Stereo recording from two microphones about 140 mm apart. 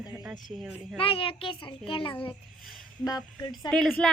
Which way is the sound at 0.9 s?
40° left (ahead or behind).